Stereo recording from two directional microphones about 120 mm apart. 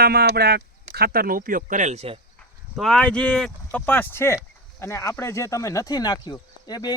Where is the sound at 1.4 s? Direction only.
90° right; by 2.1 s 70° right (ahead or behind).